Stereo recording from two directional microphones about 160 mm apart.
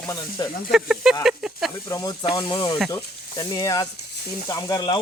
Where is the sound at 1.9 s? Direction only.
20° left (ahead or behind).